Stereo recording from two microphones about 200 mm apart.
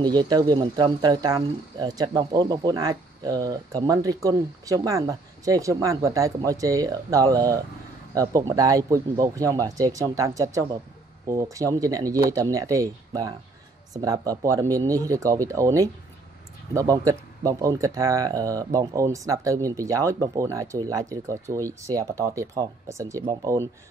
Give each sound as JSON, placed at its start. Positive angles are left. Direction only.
{"t": 0.0, "sound": "speech", "side_deg": -20}